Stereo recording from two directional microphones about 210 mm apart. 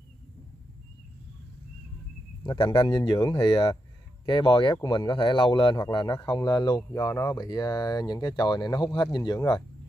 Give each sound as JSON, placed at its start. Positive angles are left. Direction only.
{"t": 2.4, "sound": "speech", "side_deg": 20}